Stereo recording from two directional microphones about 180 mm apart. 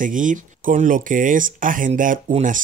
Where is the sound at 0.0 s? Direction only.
45° right (ahead or behind).